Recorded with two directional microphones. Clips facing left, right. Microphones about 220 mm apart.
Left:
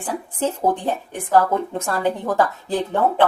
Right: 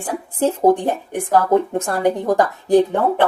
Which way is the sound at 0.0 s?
15° right (ahead or behind).